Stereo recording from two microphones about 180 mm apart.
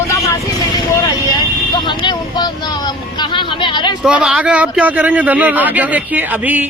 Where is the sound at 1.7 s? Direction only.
25° left (ahead or behind).